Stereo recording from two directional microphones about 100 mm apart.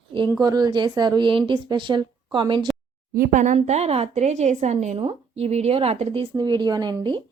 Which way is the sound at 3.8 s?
90° right.